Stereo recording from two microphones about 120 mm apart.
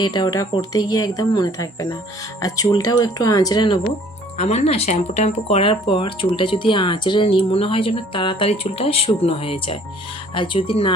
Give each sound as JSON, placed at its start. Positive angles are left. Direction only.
{"t": 0.0, "sound": "speech", "side_deg": 35}
{"t": 4.4, "sound": "speech", "side_deg": 65}